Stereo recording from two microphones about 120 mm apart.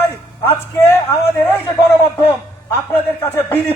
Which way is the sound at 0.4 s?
15° left (ahead or behind).